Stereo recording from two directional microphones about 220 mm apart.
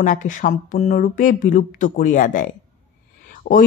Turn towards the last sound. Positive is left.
turn(degrees=45)  # may be behind; listen again after turning